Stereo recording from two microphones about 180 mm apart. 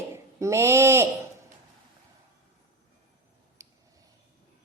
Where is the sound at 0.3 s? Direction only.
15° right (ahead or behind).